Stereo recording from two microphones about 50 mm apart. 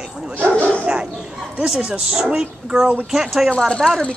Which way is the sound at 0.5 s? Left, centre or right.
Left.